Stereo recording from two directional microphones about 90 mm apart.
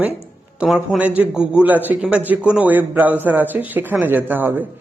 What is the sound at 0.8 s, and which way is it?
A man's voice, 20° right (ahead or behind).